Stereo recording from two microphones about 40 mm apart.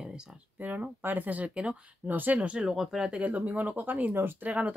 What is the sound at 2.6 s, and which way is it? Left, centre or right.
Speech, centre.